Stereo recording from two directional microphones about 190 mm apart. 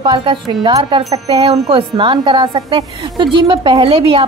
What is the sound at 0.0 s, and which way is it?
Wind chime, 25° right (ahead or behind).